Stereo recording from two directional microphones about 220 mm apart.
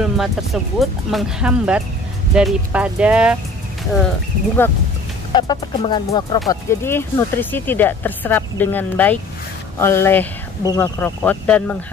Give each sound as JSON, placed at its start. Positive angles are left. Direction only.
{"t": 0.0, "sound": "speech", "side_deg": 0}
{"t": 5.3, "sound": "speech", "side_deg": 20}